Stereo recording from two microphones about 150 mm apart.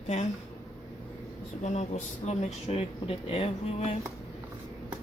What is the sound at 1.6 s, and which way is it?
Speech, 50° left (ahead or behind).